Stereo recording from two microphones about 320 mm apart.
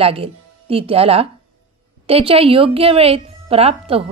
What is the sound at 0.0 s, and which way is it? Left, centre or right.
Speech, centre.